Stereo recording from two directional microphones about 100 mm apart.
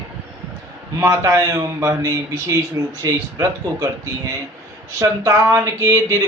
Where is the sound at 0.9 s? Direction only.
30° right (ahead or behind).